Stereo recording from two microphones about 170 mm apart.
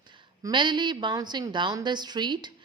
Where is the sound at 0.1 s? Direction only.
25° right (ahead or behind).